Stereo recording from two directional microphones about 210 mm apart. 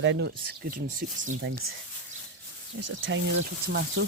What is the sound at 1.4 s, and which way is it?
Speech, 70° right (ahead or behind).